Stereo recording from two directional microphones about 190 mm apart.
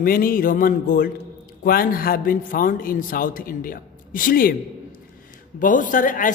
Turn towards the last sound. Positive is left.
turn(degrees=45)  # may be behind; listen again after turning